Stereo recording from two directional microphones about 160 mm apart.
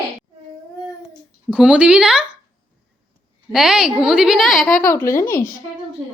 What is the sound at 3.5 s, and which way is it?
A woman's voice, 5° right (ahead or behind).